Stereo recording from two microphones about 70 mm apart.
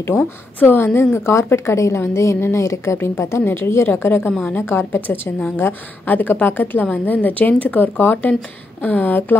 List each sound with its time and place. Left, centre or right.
0.6 s a woman's voice: left